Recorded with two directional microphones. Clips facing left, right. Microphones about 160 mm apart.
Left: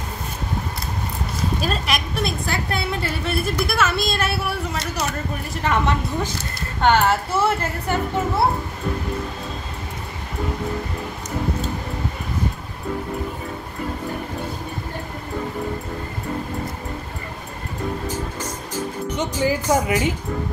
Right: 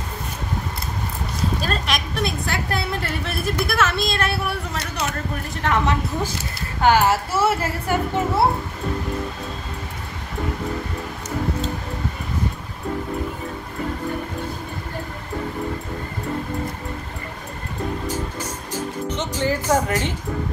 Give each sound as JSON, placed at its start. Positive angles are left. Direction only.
{"t": 1.6, "sound": "a woman's voice", "side_deg": 5}
{"t": 19.1, "sound": "a woman's voice", "side_deg": 10}